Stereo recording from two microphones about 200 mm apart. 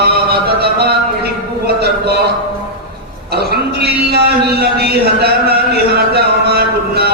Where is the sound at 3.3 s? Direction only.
50° right (ahead or behind).